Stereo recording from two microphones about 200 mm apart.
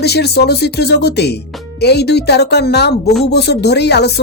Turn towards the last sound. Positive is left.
turn(degrees=55)  # may be behind; listen again after turning